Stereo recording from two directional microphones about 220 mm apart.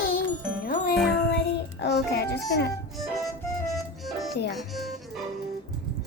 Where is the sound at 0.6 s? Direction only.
40° left (ahead or behind).